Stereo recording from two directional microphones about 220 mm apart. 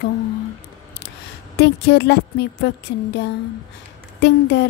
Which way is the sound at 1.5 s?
50° left (ahead or behind).